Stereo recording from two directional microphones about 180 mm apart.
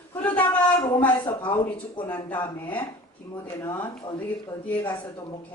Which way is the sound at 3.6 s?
10° left (ahead or behind).